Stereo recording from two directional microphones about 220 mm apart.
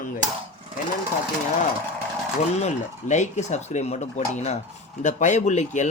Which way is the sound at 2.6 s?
35° left (ahead or behind).